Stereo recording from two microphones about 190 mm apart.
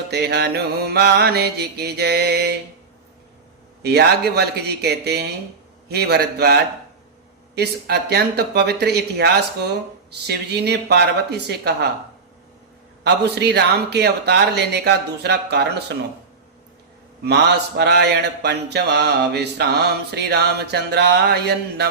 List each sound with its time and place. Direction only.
0.1 s mantra: 60° right (ahead or behind)
3.8 s mantra: 60° right (ahead or behind)
13.2 s mantra: 60° right (ahead or behind)
17.2 s mantra: 60° right (ahead or behind)